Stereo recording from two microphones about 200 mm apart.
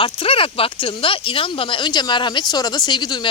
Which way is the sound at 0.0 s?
25° left (ahead or behind).